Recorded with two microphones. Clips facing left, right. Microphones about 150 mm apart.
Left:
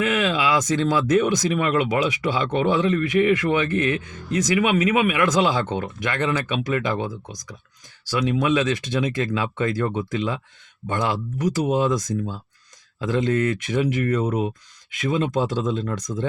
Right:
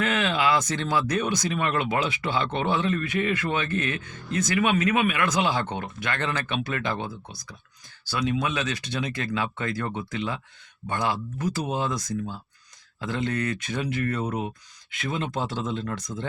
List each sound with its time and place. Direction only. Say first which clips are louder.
0.0 s speech: left 3 dB; 10° left (ahead or behind)
8.2 s speech: left 6 dB; 25° left (ahead or behind)
13.1 s speech: left 7 dB; 20° left (ahead or behind)